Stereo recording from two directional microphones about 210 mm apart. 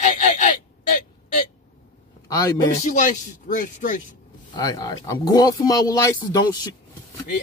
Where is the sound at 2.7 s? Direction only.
35° left (ahead or behind).